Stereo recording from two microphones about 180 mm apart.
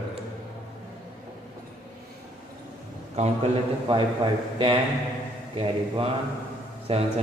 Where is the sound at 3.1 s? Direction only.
35° right (ahead or behind).